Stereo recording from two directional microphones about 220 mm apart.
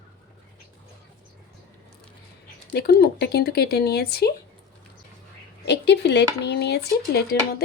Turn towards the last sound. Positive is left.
turn(degrees=50)  # may be behind; listen again after turning